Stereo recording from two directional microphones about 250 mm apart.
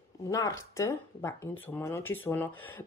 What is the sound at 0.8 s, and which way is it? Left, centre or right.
A woman's voice, centre.